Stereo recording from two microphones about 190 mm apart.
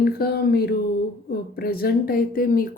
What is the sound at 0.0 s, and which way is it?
Speech, 55° left (ahead or behind).